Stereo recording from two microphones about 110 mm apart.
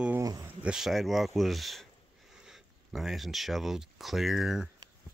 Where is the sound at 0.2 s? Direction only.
30° right (ahead or behind).